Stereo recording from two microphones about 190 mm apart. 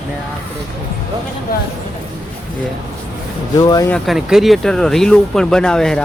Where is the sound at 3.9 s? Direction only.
Centre (ahead or behind).